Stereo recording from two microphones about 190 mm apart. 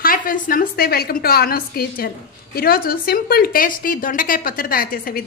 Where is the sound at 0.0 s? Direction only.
45° left (ahead or behind).